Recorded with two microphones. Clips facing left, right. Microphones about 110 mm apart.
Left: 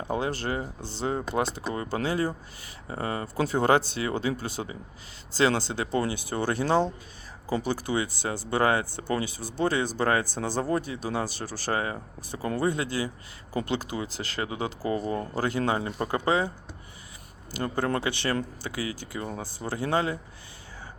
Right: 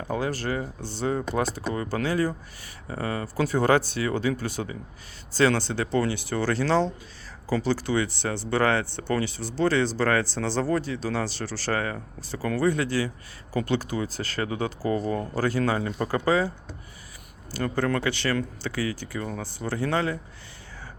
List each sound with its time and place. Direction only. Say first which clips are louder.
0.1 s speech: right 1 dB; 25° left (ahead or behind)
17.5 s speech: right 2 dB; 20° left (ahead or behind)